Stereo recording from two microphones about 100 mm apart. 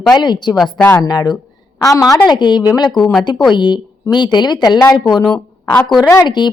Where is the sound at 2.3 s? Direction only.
50° left (ahead or behind).